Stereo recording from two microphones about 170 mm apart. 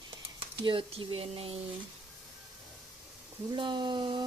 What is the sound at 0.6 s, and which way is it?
A woman's voice, 30° right (ahead or behind).